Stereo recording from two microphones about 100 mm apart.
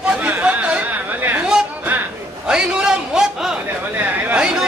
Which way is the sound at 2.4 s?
10° right (ahead or behind).